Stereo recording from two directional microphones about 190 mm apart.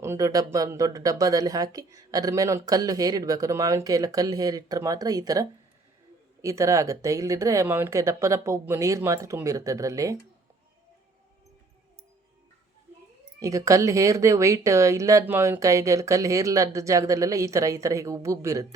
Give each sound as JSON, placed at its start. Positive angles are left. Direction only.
{"t": 0.0, "sound": "speech", "side_deg": -15}
{"t": 13.4, "sound": "speech", "side_deg": -15}